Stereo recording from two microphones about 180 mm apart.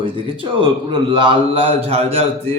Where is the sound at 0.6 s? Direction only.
25° right (ahead or behind).